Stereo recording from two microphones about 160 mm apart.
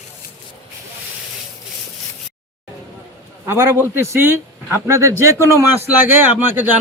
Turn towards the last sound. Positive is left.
turn(degrees=-10)  # may be behind; listen again after turning